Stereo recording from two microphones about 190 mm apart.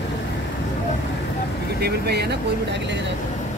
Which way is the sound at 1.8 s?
60° right (ahead or behind).